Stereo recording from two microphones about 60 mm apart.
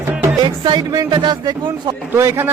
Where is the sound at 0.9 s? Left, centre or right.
Right.